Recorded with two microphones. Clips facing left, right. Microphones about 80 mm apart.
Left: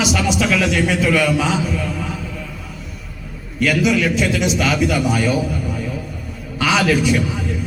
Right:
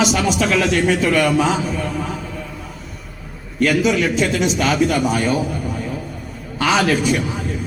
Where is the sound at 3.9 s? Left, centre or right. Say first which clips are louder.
Even; right.